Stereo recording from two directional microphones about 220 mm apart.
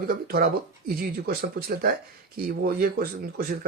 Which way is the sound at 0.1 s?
40° right (ahead or behind).